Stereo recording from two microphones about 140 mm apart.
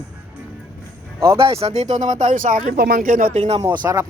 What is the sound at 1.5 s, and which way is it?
Speech, 45° right (ahead or behind).